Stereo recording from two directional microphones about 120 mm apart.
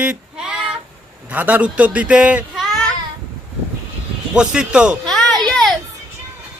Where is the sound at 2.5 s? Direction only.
Centre (ahead or behind).